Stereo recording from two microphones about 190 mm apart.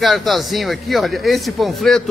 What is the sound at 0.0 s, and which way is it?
A man's voice, centre (ahead or behind).